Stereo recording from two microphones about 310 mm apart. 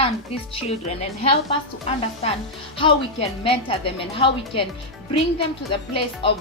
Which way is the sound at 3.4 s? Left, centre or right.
Centre.